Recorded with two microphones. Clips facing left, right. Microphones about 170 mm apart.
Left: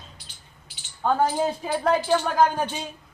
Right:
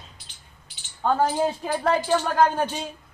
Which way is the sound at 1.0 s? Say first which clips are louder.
Even; centre (ahead or behind).